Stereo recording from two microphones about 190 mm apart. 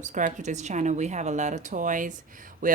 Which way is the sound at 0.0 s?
40° right (ahead or behind).